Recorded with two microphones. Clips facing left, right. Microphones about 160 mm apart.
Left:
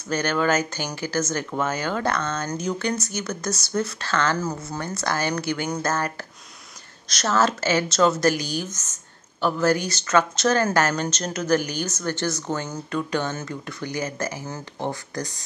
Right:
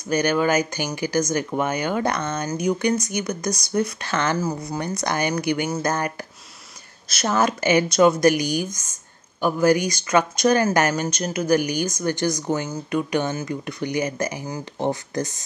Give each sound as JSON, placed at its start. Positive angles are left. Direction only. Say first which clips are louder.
{"t": 0.1, "sound": "speech", "louder": "right 3 dB", "side_deg": -10}